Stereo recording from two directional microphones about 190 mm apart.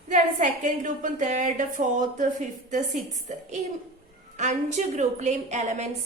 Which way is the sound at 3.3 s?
40° right (ahead or behind).